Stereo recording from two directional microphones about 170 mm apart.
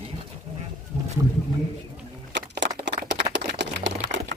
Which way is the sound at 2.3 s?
90° right.